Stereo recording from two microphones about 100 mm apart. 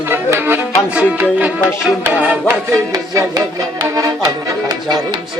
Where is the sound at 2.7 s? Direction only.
35° right (ahead or behind).